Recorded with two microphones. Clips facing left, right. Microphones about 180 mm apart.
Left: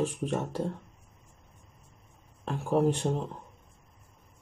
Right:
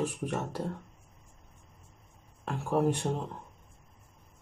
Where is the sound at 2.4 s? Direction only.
20° left (ahead or behind).